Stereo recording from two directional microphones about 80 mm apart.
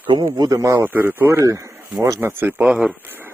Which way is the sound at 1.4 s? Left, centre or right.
Right.